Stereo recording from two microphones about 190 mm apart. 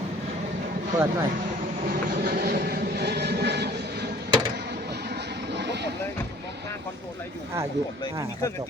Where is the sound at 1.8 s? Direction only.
50° right (ahead or behind).